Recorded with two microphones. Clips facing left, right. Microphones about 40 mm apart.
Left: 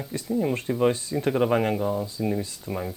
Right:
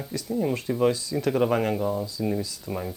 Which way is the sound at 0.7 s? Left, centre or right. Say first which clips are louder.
Even; left.